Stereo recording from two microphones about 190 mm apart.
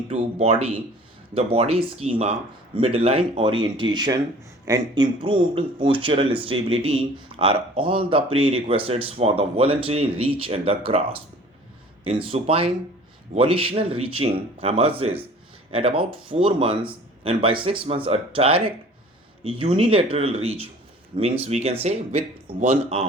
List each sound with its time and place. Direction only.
0.1 s speech: 35° right (ahead or behind)
12.3 s speech: 30° right (ahead or behind)